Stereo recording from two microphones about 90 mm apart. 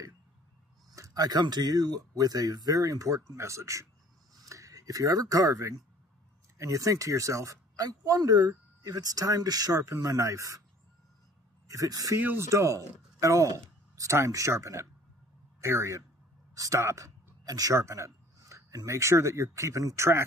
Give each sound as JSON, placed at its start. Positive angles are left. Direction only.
{"t": 0.9, "sound": "speech", "side_deg": -40}
{"t": 11.6, "sound": "speech", "side_deg": -40}